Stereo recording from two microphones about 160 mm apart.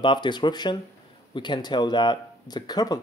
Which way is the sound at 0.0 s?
30° left (ahead or behind).